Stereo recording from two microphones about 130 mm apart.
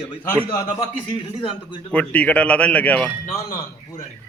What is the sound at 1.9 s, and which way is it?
Speech, 10° left (ahead or behind).